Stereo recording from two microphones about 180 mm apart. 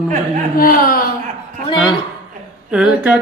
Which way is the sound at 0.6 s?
55° left (ahead or behind).